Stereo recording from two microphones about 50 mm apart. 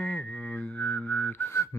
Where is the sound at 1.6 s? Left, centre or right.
Left.